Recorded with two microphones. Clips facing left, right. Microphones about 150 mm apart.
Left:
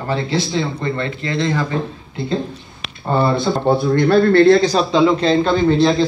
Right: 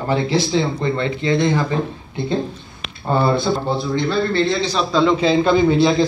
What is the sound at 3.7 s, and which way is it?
Speech, 55° left (ahead or behind).